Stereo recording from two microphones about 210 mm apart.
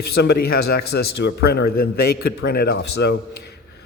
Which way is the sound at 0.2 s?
50° left (ahead or behind).